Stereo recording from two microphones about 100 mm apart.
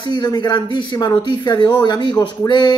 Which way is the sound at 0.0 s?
45° left (ahead or behind).